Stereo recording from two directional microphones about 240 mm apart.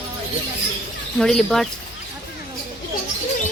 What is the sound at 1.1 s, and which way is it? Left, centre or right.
Speech, centre.